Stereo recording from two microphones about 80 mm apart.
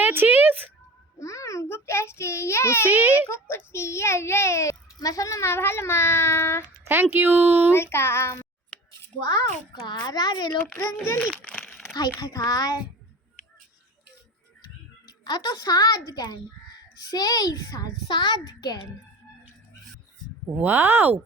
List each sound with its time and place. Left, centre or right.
0.0 s speech: right
1.2 s a child's voice: left
2.8 s speech: right
3.2 s a child's voice: left
6.8 s speech: right
7.7 s a child's voice: left
9.2 s a child's voice: left
10.7 s a child's voice: centre
11.4 s a sound: centre
11.9 s a child's voice: left
15.2 s a child's voice: left
20.6 s speech: right